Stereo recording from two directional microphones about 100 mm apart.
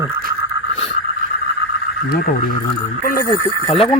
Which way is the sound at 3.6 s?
70° left (ahead or behind).